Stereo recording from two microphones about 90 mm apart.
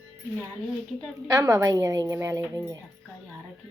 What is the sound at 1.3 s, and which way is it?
A woman's voice, 40° right (ahead or behind).